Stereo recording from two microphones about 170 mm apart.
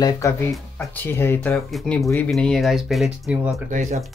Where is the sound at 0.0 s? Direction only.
20° left (ahead or behind).